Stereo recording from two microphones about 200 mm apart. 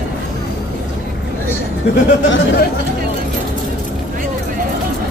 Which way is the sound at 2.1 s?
55° left (ahead or behind).